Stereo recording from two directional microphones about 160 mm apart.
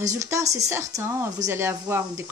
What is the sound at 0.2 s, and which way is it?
Speech, 20° right (ahead or behind).